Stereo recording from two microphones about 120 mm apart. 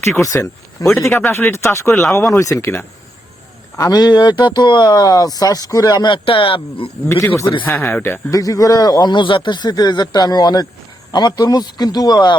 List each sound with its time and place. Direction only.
0.2 s speech: 25° left (ahead or behind)
3.8 s speech: 30° left (ahead or behind); by 6.9 s 50° left (ahead or behind)
7.1 s speech: 25° left (ahead or behind)
7.6 s speech: 15° left (ahead or behind)
8.3 s speech: 30° left (ahead or behind)